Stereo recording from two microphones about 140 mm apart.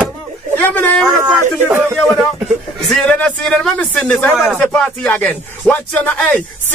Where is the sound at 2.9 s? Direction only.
5° left (ahead or behind).